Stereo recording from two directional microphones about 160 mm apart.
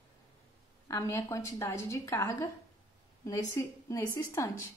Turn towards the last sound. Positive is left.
turn(degrees=15)  # may be behind; listen again after turning